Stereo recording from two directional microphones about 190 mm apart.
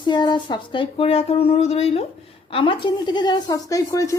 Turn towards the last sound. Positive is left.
turn(degrees=15)  # may be behind; listen again after turning